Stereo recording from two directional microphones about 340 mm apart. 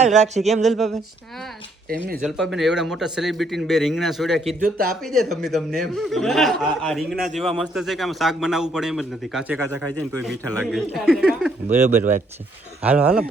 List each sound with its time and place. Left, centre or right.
0.4 s a man's voice: centre
2.4 s a man's voice: centre
4.4 s speech: right
5.0 s a man's voice: centre